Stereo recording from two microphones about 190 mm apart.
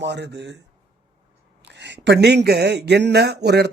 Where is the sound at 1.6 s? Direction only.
65° right (ahead or behind).